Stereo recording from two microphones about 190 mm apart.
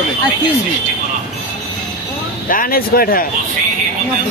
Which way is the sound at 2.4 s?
45° left (ahead or behind).